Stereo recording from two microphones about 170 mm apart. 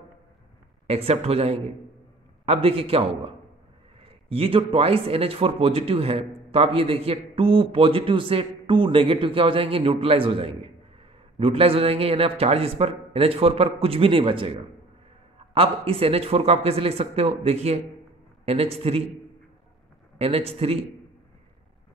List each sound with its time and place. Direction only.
0.8 s a man's voice: 35° right (ahead or behind)
20.2 s a man's voice: 35° right (ahead or behind)